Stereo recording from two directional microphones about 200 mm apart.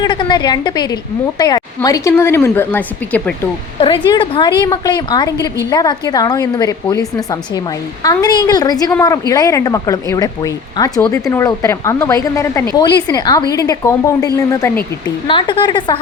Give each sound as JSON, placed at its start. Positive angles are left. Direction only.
{"t": 0.0, "sound": "a woman's voice", "side_deg": 20}
{"t": 3.8, "sound": "a woman's voice", "side_deg": 25}